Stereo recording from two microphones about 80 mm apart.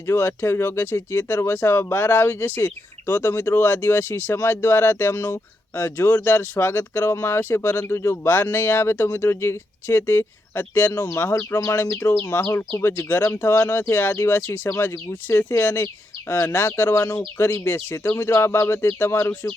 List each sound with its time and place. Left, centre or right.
0.1 s speech: left
11.3 s speech: left
19.3 s speech: centre